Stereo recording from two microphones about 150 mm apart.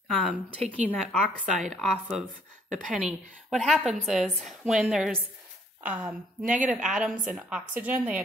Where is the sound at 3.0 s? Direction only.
5° right (ahead or behind).